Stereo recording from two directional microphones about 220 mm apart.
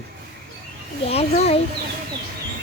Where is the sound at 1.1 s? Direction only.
30° left (ahead or behind).